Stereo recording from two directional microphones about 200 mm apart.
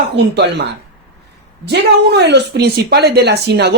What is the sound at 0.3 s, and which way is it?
Speech, 60° right (ahead or behind).